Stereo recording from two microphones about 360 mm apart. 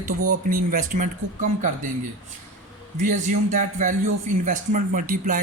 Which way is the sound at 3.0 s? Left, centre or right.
Right.